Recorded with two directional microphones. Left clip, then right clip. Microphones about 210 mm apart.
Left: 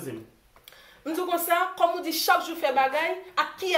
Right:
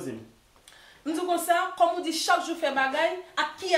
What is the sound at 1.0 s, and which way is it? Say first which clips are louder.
A woman's voice: right 1 dB; 10° left (ahead or behind).